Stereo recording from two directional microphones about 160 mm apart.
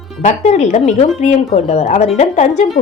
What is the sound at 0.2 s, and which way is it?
Speech, 45° left (ahead or behind).